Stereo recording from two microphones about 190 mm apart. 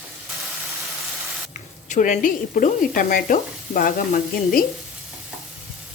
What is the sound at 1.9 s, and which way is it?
Stir, 40° left (ahead or behind).